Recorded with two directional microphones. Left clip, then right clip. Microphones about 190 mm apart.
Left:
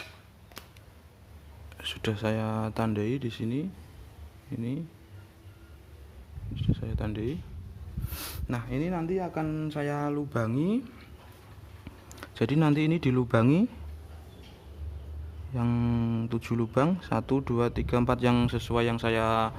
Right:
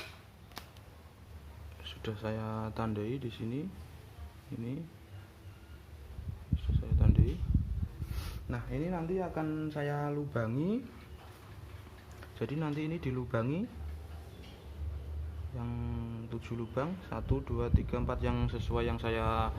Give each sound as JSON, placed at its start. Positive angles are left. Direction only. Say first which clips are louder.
{"t": 0.6, "sound": "a sound", "louder": "left 1 dB", "side_deg": 5}
{"t": 1.8, "sound": "speech", "louder": "left 9 dB", "side_deg": 45}
{"t": 6.7, "sound": "a sound", "louder": "left 1 dB", "side_deg": 35}
{"t": 8.1, "sound": "speech", "louder": "left 8 dB", "side_deg": 40}
{"t": 12.2, "sound": "speech", "louder": "left 11 dB", "side_deg": 55}
{"t": 15.5, "sound": "speech", "louder": "left 13 dB", "side_deg": 55}